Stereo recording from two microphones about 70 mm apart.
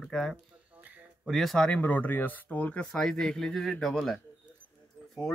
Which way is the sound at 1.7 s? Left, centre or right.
Left.